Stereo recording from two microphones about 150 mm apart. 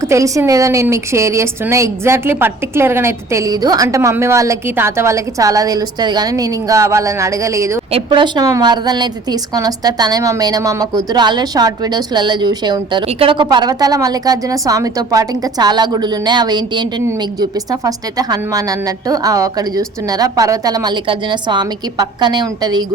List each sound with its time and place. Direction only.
0.0 s a woman's voice: 20° right (ahead or behind)
7.9 s a woman's voice: 30° right (ahead or behind)